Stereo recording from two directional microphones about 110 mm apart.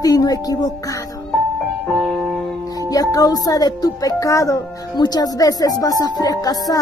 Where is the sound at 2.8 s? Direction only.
30° left (ahead or behind).